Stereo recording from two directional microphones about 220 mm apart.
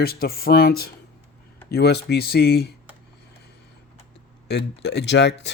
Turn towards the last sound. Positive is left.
turn(degrees=50)  # may be behind; listen again after turning